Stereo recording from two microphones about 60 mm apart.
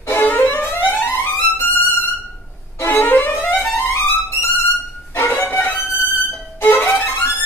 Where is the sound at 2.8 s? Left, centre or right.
Left.